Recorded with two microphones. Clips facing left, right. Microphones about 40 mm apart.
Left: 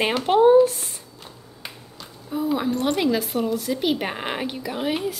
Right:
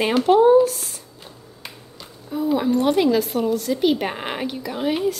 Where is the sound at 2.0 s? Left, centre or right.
Centre.